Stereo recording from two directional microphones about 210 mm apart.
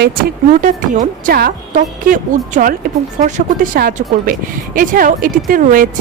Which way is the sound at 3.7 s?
45° right (ahead or behind).